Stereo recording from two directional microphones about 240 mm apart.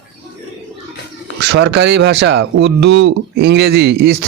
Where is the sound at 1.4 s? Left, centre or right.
Right.